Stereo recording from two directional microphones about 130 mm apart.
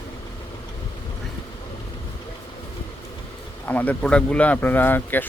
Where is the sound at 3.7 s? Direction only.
10° left (ahead or behind).